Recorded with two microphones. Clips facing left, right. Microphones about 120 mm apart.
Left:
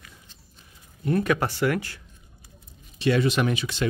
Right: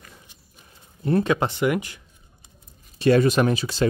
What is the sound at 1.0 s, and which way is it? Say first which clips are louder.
Speech: right 2 dB; 25° right (ahead or behind).